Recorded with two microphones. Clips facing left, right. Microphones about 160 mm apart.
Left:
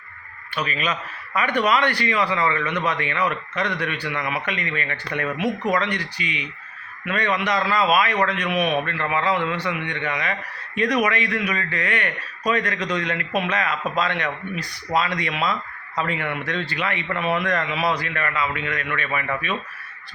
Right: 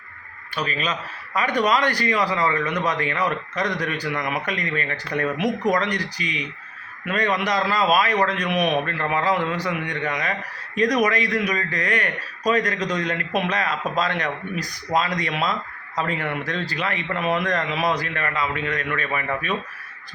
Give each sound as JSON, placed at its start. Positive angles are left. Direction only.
{"t": 0.5, "sound": "a man's voice", "side_deg": -35}